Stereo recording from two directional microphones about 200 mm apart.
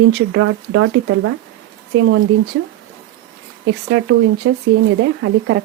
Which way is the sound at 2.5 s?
75° right (ahead or behind).